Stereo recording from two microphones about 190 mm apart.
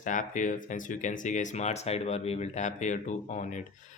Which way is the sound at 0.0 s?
40° left (ahead or behind).